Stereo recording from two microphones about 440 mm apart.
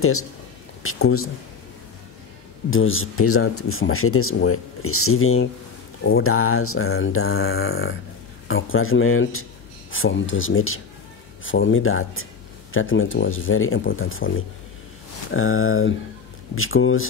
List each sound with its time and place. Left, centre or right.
0.0 s speech: left
2.7 s speech: left
15.3 s speech: left